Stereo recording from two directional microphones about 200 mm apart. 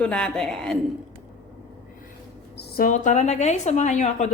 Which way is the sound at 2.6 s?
45° left (ahead or behind).